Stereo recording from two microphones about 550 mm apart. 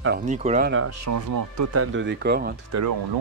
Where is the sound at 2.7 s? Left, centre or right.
Right.